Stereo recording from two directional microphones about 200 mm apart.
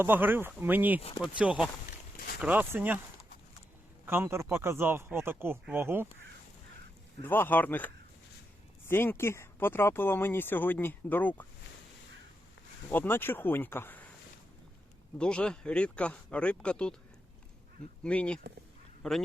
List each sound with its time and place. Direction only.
0.0 s speech: 10° right (ahead or behind)
2.1 s a sound: 50° left (ahead or behind)
2.4 s speech: 10° right (ahead or behind)
4.0 s speech: 10° right (ahead or behind)
7.2 s speech: 10° left (ahead or behind)
12.9 s speech: 10° left (ahead or behind)
15.2 s speech: 5° left (ahead or behind)
18.0 s speech: 5° left (ahead or behind)